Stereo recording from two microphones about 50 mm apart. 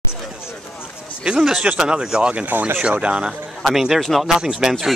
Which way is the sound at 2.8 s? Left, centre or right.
Right.